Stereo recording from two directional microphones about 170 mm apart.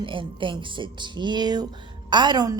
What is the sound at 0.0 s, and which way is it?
A woman's voice, 30° right (ahead or behind).